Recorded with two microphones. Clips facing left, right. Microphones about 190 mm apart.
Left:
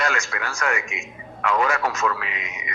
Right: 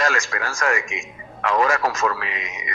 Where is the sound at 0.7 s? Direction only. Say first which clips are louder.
Right 2 dB; 90° right.